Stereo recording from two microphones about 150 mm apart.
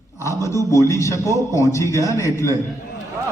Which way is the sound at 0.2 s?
20° left (ahead or behind).